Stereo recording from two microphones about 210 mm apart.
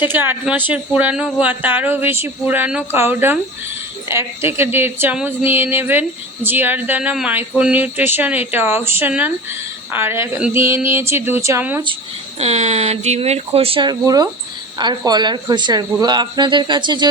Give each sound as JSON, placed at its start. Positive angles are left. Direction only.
{"t": 0.0, "sound": "speech", "side_deg": -10}
{"t": 12.4, "sound": "speech", "side_deg": -30}